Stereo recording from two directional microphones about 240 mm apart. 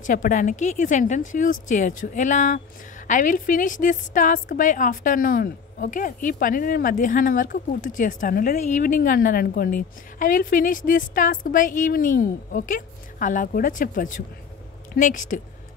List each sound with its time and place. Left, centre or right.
0.0 s a woman's voice: left